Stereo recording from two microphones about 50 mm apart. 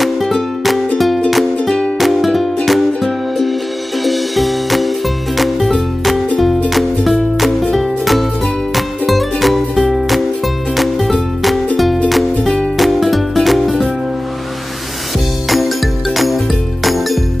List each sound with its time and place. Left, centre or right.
0.0 s music: centre
1.6 s music: centre
2.0 s music: centre
16.8 s music: centre